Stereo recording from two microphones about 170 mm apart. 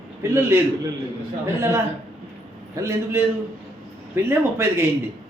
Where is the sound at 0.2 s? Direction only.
15° right (ahead or behind).